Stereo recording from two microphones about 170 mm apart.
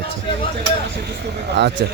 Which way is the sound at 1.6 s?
90° right.